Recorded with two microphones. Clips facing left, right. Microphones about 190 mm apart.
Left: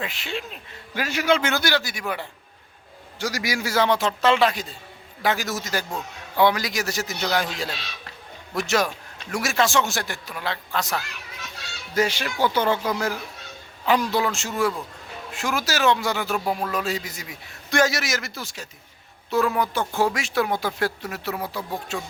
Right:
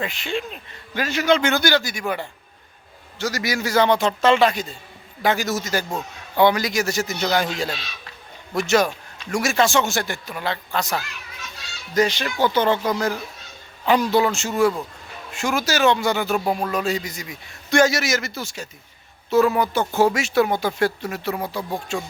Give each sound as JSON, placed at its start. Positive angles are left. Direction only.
{"t": 0.0, "sound": "a man's voice", "side_deg": 0}